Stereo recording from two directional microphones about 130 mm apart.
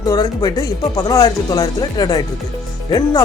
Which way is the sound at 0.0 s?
30° left (ahead or behind).